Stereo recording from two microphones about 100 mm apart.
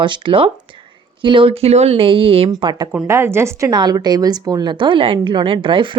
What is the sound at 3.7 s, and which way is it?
A woman's voice, 45° right (ahead or behind).